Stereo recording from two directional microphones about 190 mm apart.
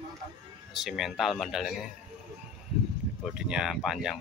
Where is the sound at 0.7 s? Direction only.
Centre (ahead or behind).